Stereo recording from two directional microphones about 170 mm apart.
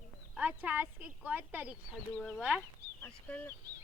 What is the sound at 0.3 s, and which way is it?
Speech, 10° right (ahead or behind).